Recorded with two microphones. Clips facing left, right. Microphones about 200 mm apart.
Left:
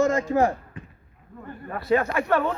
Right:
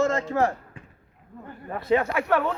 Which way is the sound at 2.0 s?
5° right (ahead or behind).